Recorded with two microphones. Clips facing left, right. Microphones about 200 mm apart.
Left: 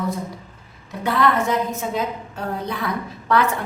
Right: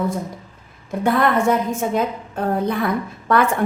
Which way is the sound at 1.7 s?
50° right (ahead or behind).